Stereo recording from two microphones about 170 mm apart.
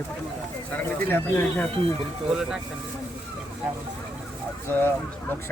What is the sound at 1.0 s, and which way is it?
Speech, 10° left (ahead or behind).